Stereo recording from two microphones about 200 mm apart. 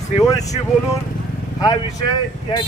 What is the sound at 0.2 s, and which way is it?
Speech, 15° left (ahead or behind).